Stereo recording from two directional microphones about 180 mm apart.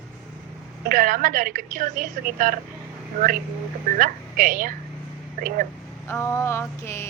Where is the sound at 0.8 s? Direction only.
50° right (ahead or behind).